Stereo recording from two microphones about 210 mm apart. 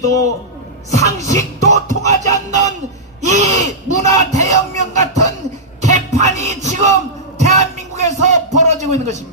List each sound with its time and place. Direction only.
0.9 s beatboxing: 35° right (ahead or behind)
2.0 s music: 35° right (ahead or behind)
3.2 s a sound: 35° right (ahead or behind)